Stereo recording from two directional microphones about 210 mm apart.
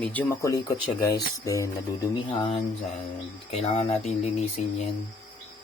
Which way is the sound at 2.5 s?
30° left (ahead or behind).